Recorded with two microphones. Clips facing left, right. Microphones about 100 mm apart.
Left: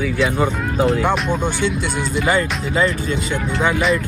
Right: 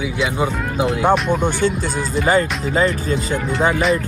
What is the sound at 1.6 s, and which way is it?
Speech, 40° right (ahead or behind).